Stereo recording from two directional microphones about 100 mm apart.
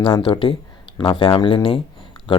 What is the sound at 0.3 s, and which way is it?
Speech, 55° left (ahead or behind).